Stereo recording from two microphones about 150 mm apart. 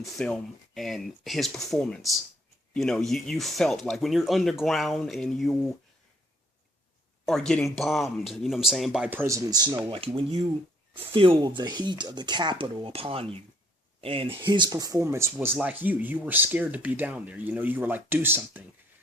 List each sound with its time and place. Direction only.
0.0 s speech: 5° left (ahead or behind)
7.3 s speech: 5° left (ahead or behind); by 9.7 s 25° right (ahead or behind)
9.9 s speech: 40° right (ahead or behind); by 18.6 s 15° right (ahead or behind)